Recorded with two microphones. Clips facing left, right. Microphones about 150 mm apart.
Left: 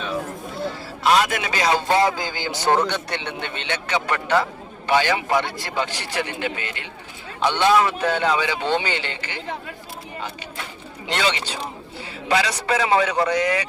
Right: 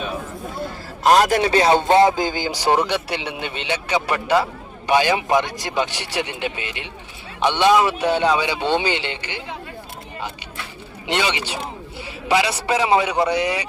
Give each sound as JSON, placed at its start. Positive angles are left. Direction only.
{"t": 1.0, "sound": "a man's voice", "side_deg": -45}
{"t": 11.0, "sound": "a man's voice", "side_deg": -20}